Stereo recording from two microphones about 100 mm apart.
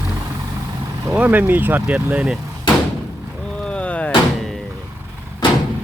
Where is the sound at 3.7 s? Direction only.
10° left (ahead or behind).